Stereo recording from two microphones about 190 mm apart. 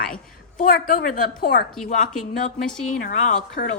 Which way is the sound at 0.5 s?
45° left (ahead or behind).